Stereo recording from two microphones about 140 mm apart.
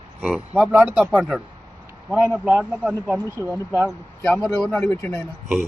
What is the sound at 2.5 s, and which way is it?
Speech, 10° right (ahead or behind).